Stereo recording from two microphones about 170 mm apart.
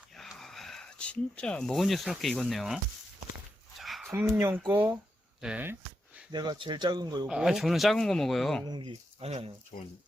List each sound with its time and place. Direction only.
0.2 s speech: centre (ahead or behind)
3.8 s a sound: centre (ahead or behind)
4.1 s speech: 15° right (ahead or behind)
6.3 s speech: 25° right (ahead or behind)
7.3 s speech: 5° right (ahead or behind)
8.6 s speech: 25° right (ahead or behind)
8.9 s speech: 35° right (ahead or behind)